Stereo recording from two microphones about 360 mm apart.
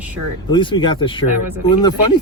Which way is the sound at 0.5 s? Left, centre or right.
Centre.